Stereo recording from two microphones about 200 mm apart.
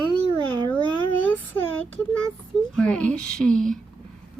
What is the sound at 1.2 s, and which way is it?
Speech, 10° left (ahead or behind).